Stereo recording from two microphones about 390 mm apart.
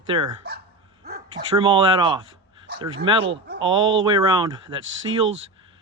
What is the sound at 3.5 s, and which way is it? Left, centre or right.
Speech, centre.